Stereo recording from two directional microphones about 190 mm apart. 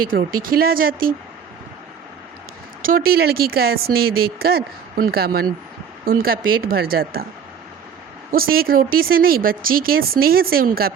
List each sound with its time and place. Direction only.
0.1 s speech: 50° right (ahead or behind)
2.8 s speech: 50° right (ahead or behind)
8.3 s speech: 50° right (ahead or behind)